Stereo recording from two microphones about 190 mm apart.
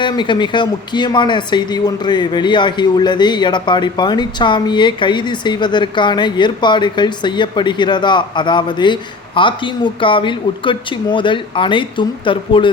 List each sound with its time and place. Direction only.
0.0 s speech: 25° left (ahead or behind)